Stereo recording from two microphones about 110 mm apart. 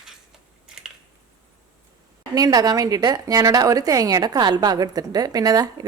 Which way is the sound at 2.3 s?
35° right (ahead or behind).